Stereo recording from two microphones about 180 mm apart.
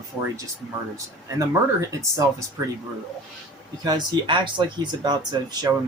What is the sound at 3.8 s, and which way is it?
Speech, 25° right (ahead or behind).